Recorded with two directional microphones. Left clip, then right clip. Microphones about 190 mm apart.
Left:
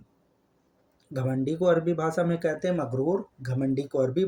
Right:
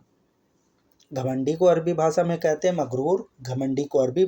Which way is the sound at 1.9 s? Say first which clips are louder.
Right 5 dB; 25° right (ahead or behind).